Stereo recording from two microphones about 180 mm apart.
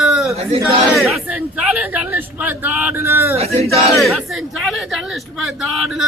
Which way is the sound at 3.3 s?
35° right (ahead or behind).